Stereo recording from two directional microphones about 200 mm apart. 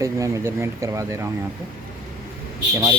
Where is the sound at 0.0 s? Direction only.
15° right (ahead or behind).